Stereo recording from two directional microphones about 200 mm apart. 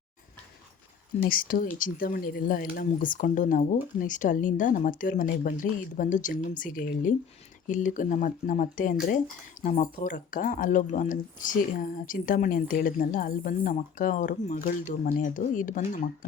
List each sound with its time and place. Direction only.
1.2 s speech: 45° left (ahead or behind)